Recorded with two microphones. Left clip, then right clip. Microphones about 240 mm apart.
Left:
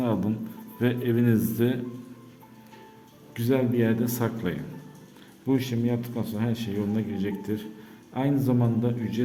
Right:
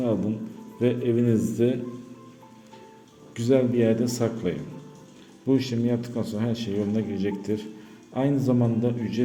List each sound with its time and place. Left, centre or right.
0.0 s a man's voice: centre
3.3 s a man's voice: centre